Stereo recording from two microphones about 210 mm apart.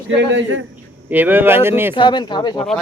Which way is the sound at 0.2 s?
60° right (ahead or behind).